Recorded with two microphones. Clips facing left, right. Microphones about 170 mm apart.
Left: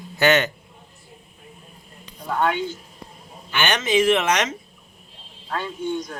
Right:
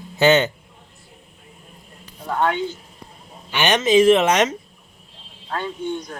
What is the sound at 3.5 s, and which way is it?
Speech, 20° right (ahead or behind).